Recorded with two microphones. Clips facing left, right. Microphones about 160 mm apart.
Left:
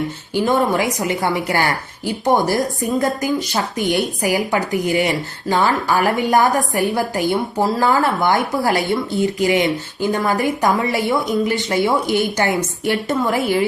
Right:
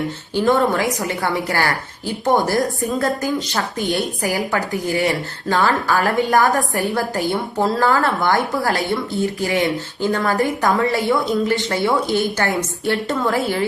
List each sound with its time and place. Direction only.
0.3 s speech: 15° left (ahead or behind)